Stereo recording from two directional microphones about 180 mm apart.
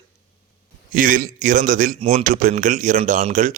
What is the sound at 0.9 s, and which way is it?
A man's voice, 50° right (ahead or behind).